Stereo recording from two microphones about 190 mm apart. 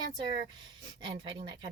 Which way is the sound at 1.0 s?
25° right (ahead or behind).